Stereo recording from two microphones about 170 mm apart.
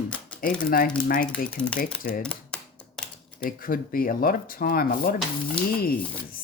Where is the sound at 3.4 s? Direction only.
55° left (ahead or behind).